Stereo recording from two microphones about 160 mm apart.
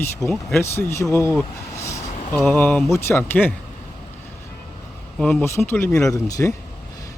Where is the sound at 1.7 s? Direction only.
15° left (ahead or behind).